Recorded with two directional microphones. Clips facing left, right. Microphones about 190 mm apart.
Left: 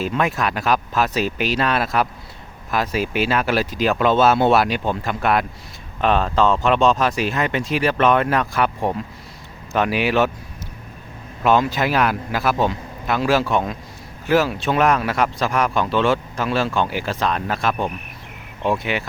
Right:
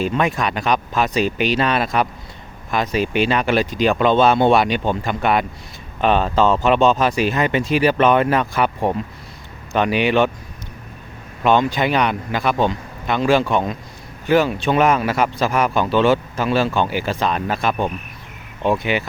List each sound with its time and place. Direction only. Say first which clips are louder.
0.0 s speech: right 2 dB; centre (ahead or behind)
11.4 s speech: right 1 dB; centre (ahead or behind)